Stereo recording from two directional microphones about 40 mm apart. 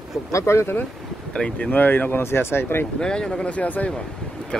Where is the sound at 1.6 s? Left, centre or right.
Left.